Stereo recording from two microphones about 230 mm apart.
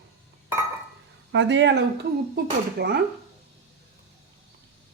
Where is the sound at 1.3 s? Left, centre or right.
Right.